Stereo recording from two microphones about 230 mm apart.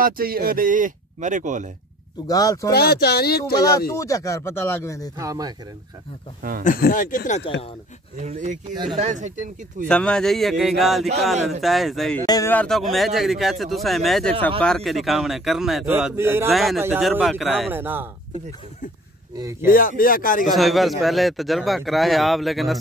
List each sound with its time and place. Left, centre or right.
0.0 s speech: right
2.2 s speech: centre
2.7 s speech: left
3.9 s speech: centre
5.1 s speech: centre
6.6 s speech: left
8.2 s speech: right
9.8 s speech: centre
12.3 s speech: centre
19.3 s speech: centre
19.7 s speech: left
20.5 s speech: centre